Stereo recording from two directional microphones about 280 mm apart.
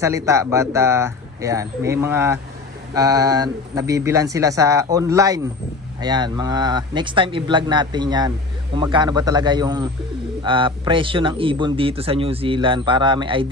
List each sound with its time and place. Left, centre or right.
0.0 s speech: centre